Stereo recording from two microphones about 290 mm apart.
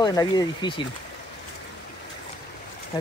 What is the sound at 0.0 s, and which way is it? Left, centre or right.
Speech, centre.